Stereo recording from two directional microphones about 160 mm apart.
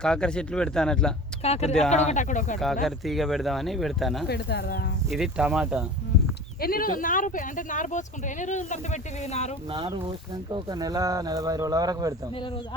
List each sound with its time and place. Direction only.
0.0 s speech: 5° left (ahead or behind)
1.4 s speech: 40° left (ahead or behind)
2.8 s speech: centre (ahead or behind)
4.3 s speech: 90° left
5.0 s speech: centre (ahead or behind)
6.6 s speech: 65° left (ahead or behind); by 9.6 s 45° left (ahead or behind)
9.6 s speech: 30° right (ahead or behind)
12.3 s speech: 35° left (ahead or behind)